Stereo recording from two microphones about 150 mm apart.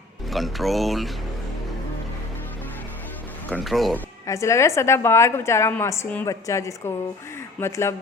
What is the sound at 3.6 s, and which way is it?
Speech, centre (ahead or behind).